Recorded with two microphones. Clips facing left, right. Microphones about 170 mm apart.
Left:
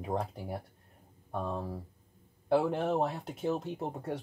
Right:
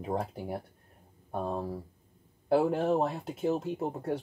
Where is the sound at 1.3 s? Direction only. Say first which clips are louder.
Right 2 dB; 40° right (ahead or behind).